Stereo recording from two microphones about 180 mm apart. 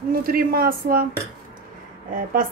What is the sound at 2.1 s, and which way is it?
Speech, 50° right (ahead or behind).